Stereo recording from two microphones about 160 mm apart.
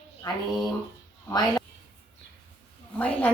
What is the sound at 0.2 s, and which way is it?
A woman's voice, 25° left (ahead or behind).